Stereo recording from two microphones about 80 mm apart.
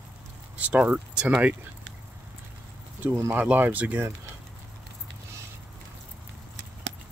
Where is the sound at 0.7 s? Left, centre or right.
Centre.